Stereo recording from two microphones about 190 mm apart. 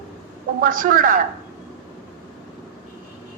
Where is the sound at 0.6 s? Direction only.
45° right (ahead or behind).